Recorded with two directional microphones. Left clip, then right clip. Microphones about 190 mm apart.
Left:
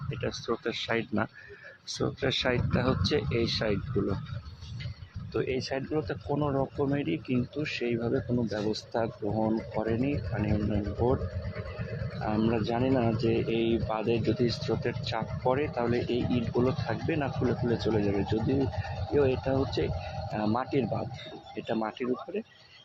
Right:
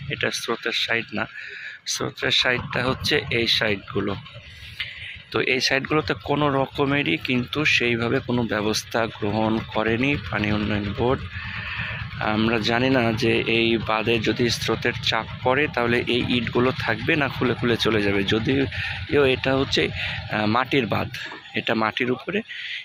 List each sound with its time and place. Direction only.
0.1 s speech: centre (ahead or behind)
0.7 s speech: 10° left (ahead or behind)
5.3 s speech: 10° right (ahead or behind)
12.2 s speech: 5° right (ahead or behind)